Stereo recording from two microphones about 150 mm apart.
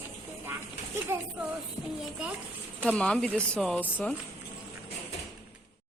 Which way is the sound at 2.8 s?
5° left (ahead or behind).